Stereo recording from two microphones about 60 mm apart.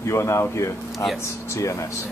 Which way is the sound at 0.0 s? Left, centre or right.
Left.